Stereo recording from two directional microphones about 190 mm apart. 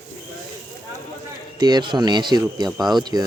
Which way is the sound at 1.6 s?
25° right (ahead or behind).